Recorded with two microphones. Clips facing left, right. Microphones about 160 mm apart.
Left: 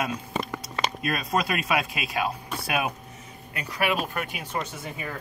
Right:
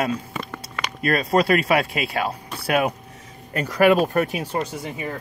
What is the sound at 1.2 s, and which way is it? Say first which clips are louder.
Speech: right 9 dB; 30° right (ahead or behind).